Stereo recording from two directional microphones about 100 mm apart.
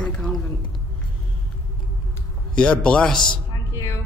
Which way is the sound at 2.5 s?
10° left (ahead or behind).